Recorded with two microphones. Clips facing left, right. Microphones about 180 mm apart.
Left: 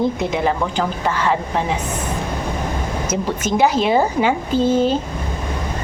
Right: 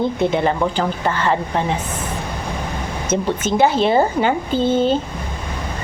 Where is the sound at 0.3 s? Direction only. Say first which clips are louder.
Right 1 dB; centre (ahead or behind).